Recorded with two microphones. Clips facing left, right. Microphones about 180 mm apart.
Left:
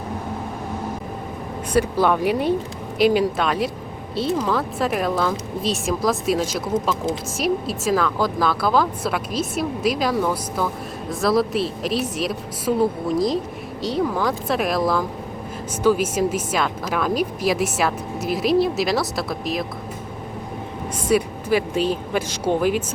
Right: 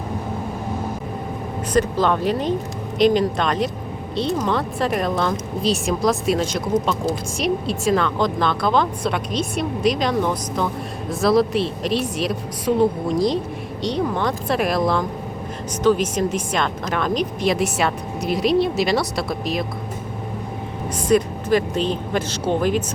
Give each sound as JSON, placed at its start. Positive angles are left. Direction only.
{"t": 1.7, "sound": "speech", "side_deg": 10}
{"t": 21.1, "sound": "speech", "side_deg": 10}